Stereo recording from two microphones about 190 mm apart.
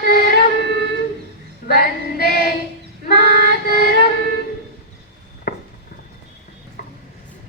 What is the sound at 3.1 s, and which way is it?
Child singing, 55° left (ahead or behind).